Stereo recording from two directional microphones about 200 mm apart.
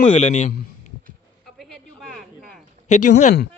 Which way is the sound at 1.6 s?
Centre (ahead or behind).